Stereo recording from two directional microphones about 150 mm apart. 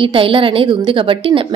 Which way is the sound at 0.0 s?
35° right (ahead or behind).